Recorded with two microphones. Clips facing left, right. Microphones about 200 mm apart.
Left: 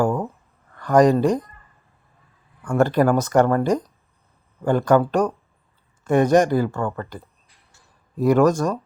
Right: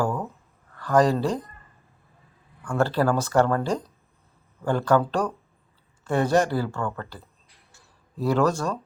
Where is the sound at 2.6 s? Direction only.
20° left (ahead or behind).